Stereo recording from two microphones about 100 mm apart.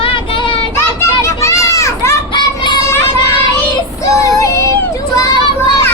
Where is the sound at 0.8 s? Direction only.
30° left (ahead or behind).